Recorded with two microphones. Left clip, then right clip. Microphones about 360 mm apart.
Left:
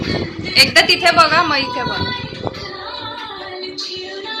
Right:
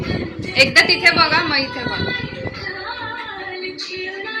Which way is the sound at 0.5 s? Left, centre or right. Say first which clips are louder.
Left 2 dB; centre.